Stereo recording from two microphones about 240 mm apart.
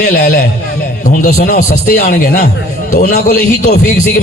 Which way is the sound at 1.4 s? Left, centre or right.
Left.